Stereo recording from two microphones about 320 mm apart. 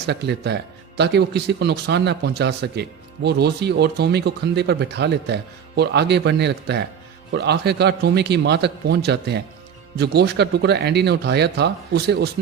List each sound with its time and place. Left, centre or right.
0.1 s speech: right